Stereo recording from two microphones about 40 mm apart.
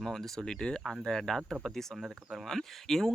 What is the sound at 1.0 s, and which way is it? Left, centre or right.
Speech, centre.